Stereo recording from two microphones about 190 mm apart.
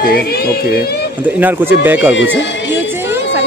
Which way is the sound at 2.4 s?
70° left (ahead or behind).